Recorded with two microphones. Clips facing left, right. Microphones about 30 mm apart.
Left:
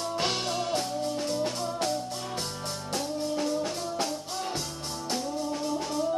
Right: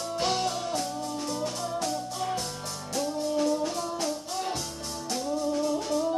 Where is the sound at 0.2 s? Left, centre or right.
Left.